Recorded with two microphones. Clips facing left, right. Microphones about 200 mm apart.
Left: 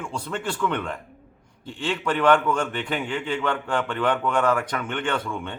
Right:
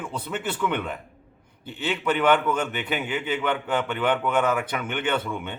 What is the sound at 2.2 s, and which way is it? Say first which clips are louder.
A man's voice: left 3 dB; 5° right (ahead or behind).